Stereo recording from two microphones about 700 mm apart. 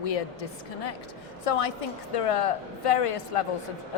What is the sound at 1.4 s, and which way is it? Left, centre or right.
Speech, left.